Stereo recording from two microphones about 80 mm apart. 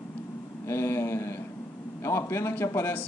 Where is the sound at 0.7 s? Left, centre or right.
Left.